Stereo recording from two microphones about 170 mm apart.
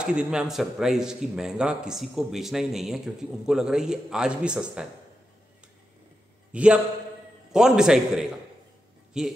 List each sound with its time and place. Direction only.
0.0 s speech: 5° right (ahead or behind)
6.5 s a man's voice: 5° right (ahead or behind)